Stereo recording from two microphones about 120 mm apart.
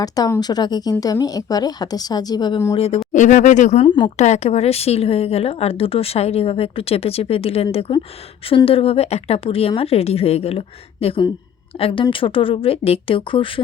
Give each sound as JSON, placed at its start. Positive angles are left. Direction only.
{"t": 0.0, "sound": "speech", "side_deg": 30}
{"t": 2.7, "sound": "speech", "side_deg": 55}
{"t": 3.1, "sound": "speech", "side_deg": 90}
{"t": 3.8, "sound": "speech", "side_deg": 40}
{"t": 4.2, "sound": "speech", "side_deg": 70}